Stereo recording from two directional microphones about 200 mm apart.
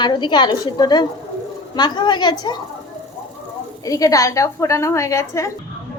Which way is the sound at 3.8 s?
15° left (ahead or behind).